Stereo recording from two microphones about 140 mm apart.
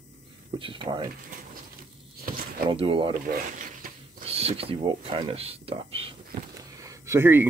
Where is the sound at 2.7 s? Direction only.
40° right (ahead or behind).